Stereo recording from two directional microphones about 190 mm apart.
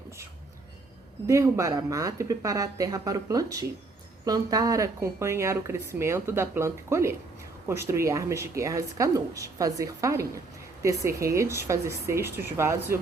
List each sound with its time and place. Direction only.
1.3 s speech: 15° right (ahead or behind)